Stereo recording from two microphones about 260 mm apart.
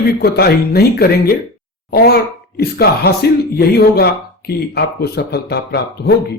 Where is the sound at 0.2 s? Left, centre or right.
Left.